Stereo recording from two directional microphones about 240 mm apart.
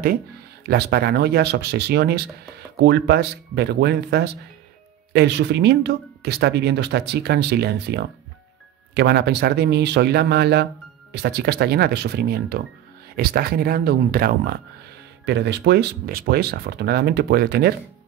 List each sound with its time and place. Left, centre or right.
0.7 s speech: right